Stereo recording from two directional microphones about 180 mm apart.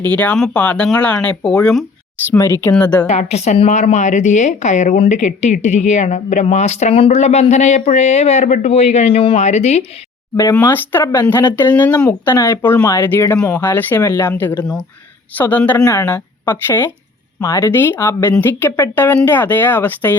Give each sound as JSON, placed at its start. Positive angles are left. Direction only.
{"t": 0.0, "sound": "speech", "side_deg": 10}
{"t": 2.3, "sound": "speech", "side_deg": 15}
{"t": 3.1, "sound": "speech", "side_deg": 35}
{"t": 10.5, "sound": "speech", "side_deg": 10}